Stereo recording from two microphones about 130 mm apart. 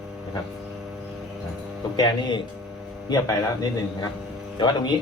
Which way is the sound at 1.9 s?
35° left (ahead or behind).